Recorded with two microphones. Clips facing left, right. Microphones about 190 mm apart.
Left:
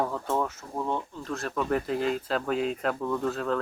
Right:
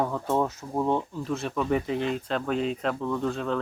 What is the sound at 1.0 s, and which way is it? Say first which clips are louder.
Speech: right 4 dB; 5° right (ahead or behind).